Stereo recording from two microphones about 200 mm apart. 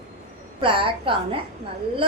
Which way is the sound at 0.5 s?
25° right (ahead or behind).